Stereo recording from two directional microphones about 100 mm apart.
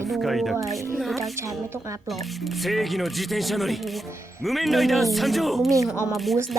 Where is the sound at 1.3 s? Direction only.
30° right (ahead or behind).